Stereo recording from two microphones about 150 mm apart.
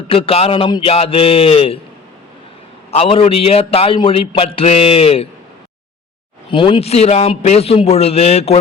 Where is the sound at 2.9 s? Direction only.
40° left (ahead or behind).